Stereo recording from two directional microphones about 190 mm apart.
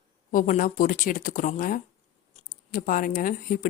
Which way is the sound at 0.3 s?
45° left (ahead or behind).